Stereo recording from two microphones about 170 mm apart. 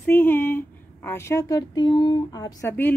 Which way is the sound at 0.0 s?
10° left (ahead or behind).